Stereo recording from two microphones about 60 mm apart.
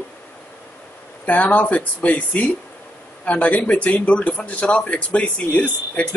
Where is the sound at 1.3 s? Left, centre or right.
Left.